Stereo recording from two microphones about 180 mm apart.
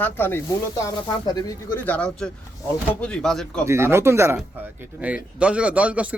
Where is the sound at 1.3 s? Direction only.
20° left (ahead or behind).